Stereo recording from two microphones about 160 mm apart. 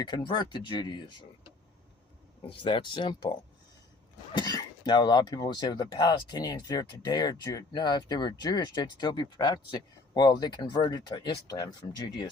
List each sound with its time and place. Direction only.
0.0 s speech: 30° left (ahead or behind)
2.5 s speech: 30° left (ahead or behind)